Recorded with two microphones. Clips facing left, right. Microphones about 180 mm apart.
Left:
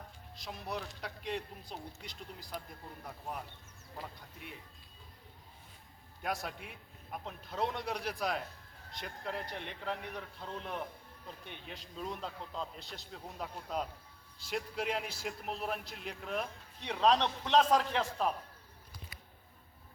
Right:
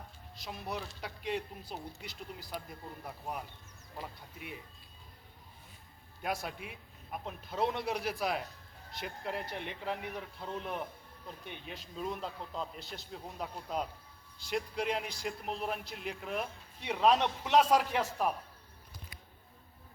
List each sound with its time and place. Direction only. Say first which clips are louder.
0.3 s a man's voice: right 1 dB; centre (ahead or behind)
6.2 s a man's voice: right 1 dB; centre (ahead or behind)